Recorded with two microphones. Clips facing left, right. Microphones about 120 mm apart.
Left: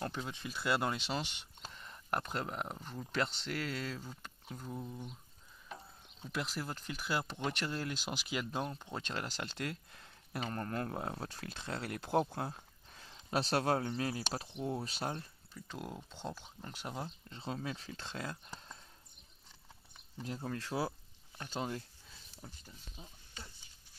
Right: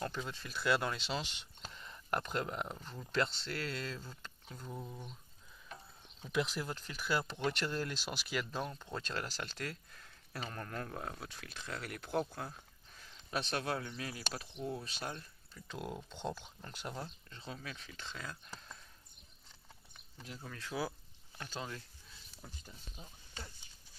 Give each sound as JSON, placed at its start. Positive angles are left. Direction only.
{"t": 0.1, "sound": "speech", "side_deg": 15}
{"t": 4.8, "sound": "speech", "side_deg": -15}
{"t": 6.2, "sound": "speech", "side_deg": 0}
{"t": 10.5, "sound": "speech", "side_deg": 30}
{"t": 15.5, "sound": "speech", "side_deg": 0}
{"t": 17.0, "sound": "speech", "side_deg": 30}
{"t": 20.2, "sound": "speech", "side_deg": 40}